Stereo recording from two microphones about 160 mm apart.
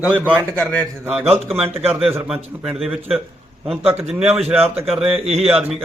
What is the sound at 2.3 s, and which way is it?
A man's voice, 5° right (ahead or behind).